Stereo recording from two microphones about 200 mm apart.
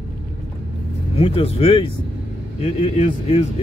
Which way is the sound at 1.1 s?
30° left (ahead or behind).